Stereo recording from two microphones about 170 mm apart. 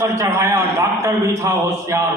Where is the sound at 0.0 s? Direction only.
15° right (ahead or behind).